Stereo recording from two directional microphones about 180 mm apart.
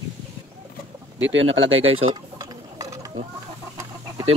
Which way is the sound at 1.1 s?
90° right.